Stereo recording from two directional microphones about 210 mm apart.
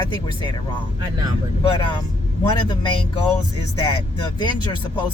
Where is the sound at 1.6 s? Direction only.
25° left (ahead or behind).